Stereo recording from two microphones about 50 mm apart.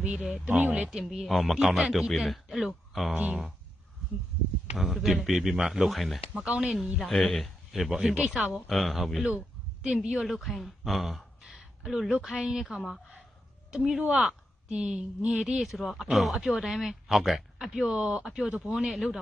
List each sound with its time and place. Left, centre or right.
0.0 s speech: right
1.2 s speech: centre
3.2 s speech: right
4.7 s speech: centre
6.3 s speech: right
7.2 s a man's voice: centre
8.1 s speech: centre
8.5 s speech: centre
11.5 s a sound: centre
12.3 s speech: centre
15.4 s speech: centre
17.9 s speech: right
18.2 s speech: centre
18.7 s speech: centre